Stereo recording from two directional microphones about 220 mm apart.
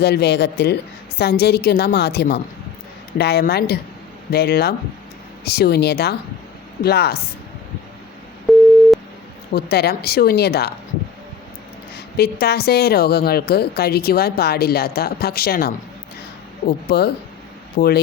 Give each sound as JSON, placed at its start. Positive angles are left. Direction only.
{"t": 0.0, "sound": "a woman's voice", "side_deg": 50}
{"t": 8.5, "sound": "busy signal", "side_deg": 0}
{"t": 9.6, "sound": "a woman's voice", "side_deg": 45}
{"t": 11.9, "sound": "a woman's voice", "side_deg": 45}